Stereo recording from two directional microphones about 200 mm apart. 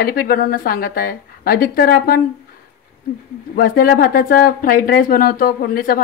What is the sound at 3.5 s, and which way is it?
Speech, 45° left (ahead or behind).